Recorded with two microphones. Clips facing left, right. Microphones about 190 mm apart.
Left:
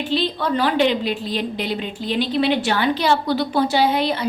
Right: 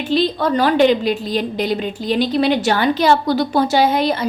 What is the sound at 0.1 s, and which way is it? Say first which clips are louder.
A woman's voice: right 6 dB; 45° right (ahead or behind).